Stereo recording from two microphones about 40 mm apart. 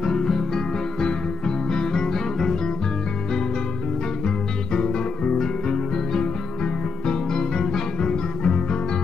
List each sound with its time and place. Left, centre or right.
0.0 s music: centre
1.7 s music: centre
5.4 s music: centre